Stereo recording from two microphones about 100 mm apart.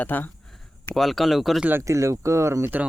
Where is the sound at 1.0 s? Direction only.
Centre (ahead or behind).